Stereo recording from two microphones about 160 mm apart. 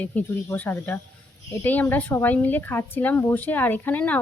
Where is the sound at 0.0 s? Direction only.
10° left (ahead or behind).